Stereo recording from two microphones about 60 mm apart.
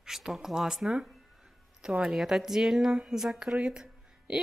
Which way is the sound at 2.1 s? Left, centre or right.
Centre.